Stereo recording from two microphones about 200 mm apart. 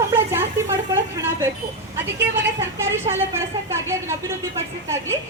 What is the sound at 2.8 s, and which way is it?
A woman's voice, 15° right (ahead or behind).